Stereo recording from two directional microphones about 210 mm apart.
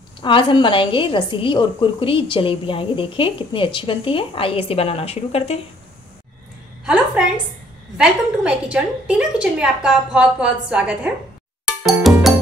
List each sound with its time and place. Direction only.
0.2 s a woman's voice: 25° left (ahead or behind)
6.9 s a sound: 5° right (ahead or behind)
8.0 s a woman's voice: 5° right (ahead or behind)
12.0 s music: centre (ahead or behind)